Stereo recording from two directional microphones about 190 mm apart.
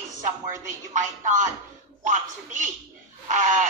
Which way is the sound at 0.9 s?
40° right (ahead or behind).